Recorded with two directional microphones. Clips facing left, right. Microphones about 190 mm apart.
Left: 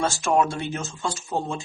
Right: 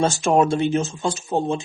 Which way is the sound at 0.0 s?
20° right (ahead or behind).